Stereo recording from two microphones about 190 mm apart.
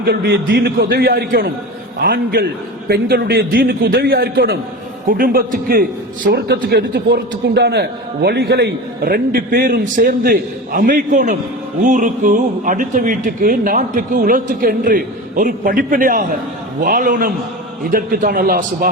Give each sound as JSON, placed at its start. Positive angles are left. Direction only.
{"t": 0.0, "sound": "a man's voice", "side_deg": -55}